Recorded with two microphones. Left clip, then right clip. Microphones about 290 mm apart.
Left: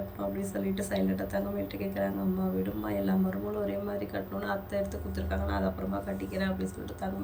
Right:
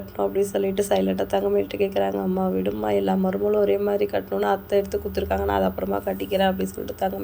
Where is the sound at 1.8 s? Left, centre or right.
Right.